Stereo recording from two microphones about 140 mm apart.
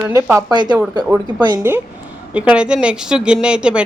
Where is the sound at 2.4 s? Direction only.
10° right (ahead or behind).